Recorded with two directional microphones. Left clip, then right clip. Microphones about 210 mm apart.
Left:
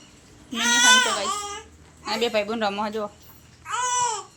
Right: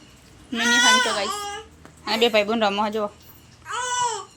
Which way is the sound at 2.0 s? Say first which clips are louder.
Right 4 dB; 20° right (ahead or behind).